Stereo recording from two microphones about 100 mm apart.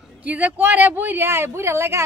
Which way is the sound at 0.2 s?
15° right (ahead or behind).